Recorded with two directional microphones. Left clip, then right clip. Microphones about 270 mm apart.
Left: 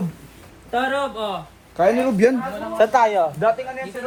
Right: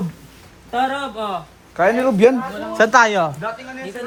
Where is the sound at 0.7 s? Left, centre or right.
Centre.